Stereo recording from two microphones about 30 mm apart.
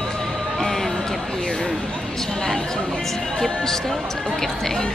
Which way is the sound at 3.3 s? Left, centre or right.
Centre.